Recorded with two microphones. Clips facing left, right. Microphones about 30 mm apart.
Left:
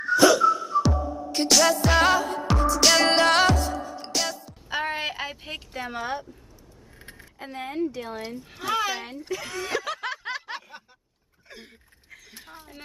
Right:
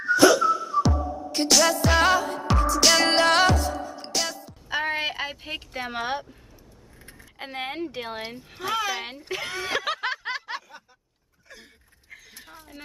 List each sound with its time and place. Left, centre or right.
0.2 s music: centre
5.8 s speech: right
7.3 s speech: right
8.5 s speech: centre
9.3 s snicker: right
11.4 s a sound: left
12.4 s speech: centre